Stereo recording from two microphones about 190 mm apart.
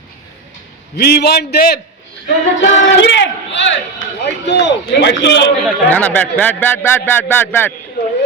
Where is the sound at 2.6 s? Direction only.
70° left (ahead or behind).